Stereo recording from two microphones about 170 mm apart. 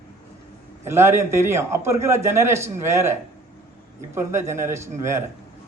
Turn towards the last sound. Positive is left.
turn(degrees=-15)  # may be behind; listen again after turning